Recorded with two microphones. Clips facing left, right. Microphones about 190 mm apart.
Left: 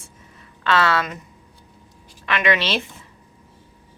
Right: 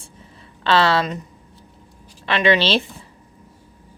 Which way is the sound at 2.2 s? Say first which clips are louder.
Right 4 dB; 30° right (ahead or behind).